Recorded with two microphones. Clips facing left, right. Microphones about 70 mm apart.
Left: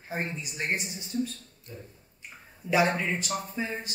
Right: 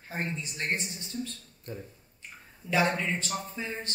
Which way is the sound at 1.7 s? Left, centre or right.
Right.